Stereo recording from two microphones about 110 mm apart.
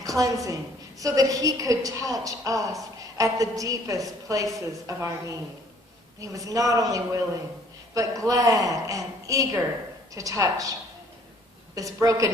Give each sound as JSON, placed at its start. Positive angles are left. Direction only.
{"t": 0.0, "sound": "a woman's voice", "side_deg": -30}